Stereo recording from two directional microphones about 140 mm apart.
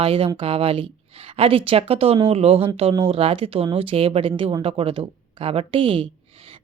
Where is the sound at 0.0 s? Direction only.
40° right (ahead or behind).